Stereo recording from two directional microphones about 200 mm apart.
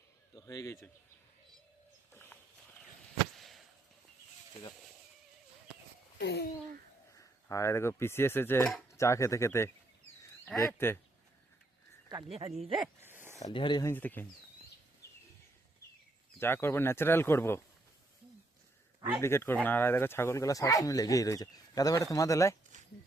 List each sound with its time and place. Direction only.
0.3 s speech: 15° left (ahead or behind)
2.1 s a sound: 10° left (ahead or behind)
6.1 s speech: 55° left (ahead or behind)
7.2 s speech: 15° left (ahead or behind)
10.7 s speech: 10° left (ahead or behind)
12.3 s speech: 30° right (ahead or behind)
13.0 s a sound: 10° right (ahead or behind)
13.4 s speech: 25° left (ahead or behind)
13.9 s speech: 10° left (ahead or behind)
16.4 s speech: 10° left (ahead or behind)
19.2 s speech: 10° left (ahead or behind)